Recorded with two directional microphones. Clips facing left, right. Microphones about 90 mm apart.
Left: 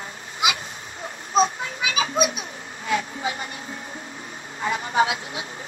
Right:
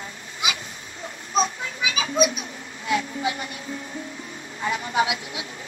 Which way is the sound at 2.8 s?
40° left (ahead or behind).